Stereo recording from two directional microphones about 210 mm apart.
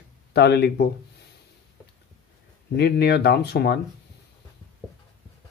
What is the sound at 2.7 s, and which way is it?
Speech, 50° left (ahead or behind).